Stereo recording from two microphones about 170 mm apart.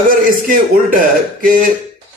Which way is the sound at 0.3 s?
55° right (ahead or behind).